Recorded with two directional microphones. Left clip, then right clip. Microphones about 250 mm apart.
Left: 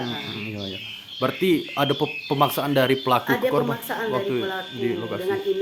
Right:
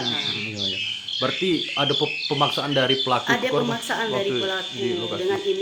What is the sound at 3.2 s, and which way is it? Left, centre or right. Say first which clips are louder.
Speech: even; centre.